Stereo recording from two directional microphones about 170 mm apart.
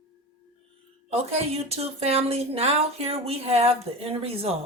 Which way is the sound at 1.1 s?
35° right (ahead or behind).